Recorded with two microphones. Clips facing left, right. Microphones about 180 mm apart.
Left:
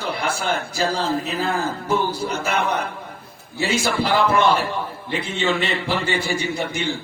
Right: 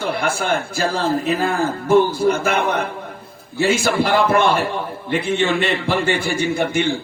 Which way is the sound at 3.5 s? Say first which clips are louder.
Right 4 dB; 50° right (ahead or behind).